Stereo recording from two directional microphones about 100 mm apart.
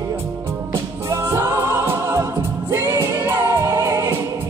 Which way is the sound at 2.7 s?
30° right (ahead or behind).